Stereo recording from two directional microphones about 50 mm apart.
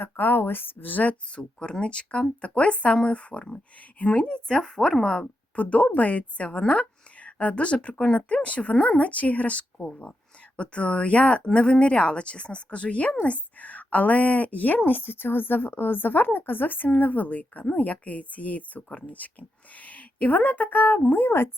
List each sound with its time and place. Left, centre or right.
0.0 s speech: left
1.4 s speech: centre
5.2 s speech: left